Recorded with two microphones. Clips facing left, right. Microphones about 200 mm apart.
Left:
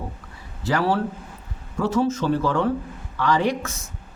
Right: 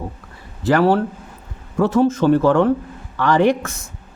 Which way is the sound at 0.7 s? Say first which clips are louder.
Right 7 dB; 55° right (ahead or behind).